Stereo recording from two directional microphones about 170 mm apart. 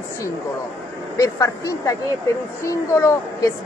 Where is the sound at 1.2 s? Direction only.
20° left (ahead or behind).